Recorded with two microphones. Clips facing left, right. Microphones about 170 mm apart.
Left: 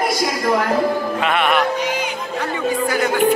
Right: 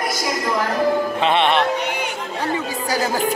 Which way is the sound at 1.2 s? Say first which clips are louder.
Even; 30° right (ahead or behind).